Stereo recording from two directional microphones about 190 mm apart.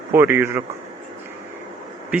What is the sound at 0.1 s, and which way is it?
Speech, 15° right (ahead or behind).